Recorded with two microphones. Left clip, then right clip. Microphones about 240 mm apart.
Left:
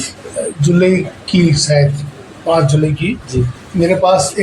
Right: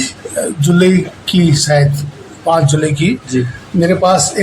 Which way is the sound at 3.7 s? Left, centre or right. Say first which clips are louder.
Even; right.